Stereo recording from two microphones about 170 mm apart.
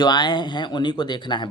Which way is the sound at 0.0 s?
25° left (ahead or behind).